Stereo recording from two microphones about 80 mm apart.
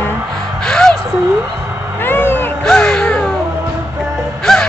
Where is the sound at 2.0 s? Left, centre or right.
Left.